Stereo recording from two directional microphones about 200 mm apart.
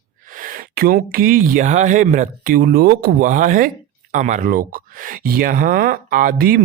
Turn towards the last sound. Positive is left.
turn(degrees=-45)  # may be behind; listen again after turning